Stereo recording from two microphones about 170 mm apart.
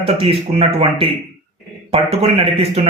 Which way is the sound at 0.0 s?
35° right (ahead or behind).